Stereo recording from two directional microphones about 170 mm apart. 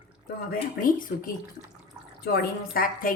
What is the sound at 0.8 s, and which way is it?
Speech, 55° left (ahead or behind).